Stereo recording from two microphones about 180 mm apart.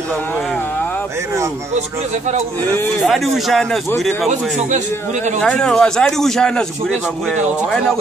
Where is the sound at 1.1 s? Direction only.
15° right (ahead or behind).